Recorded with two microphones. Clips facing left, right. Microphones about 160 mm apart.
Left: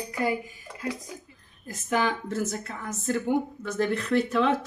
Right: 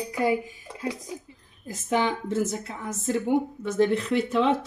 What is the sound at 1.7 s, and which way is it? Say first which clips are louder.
A woman's voice: right 1 dB; 25° right (ahead or behind).